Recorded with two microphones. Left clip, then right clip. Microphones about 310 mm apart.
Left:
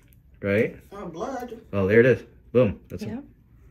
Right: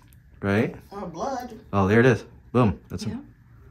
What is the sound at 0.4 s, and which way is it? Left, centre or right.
Speech, centre.